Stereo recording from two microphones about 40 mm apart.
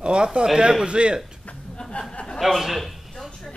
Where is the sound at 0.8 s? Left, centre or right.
Right.